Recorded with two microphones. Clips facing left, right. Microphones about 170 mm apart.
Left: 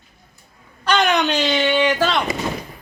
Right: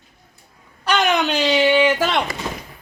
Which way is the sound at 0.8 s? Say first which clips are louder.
Left 1 dB; 5° right (ahead or behind).